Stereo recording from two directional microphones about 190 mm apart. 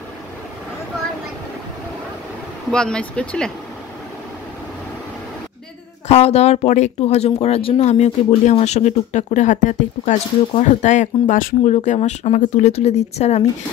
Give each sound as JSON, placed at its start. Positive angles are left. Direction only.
{"t": 2.7, "sound": "speech", "side_deg": 5}
{"t": 6.0, "sound": "speech", "side_deg": 35}